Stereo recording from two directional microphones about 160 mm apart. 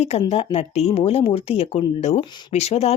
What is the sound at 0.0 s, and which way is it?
Speech, 40° left (ahead or behind).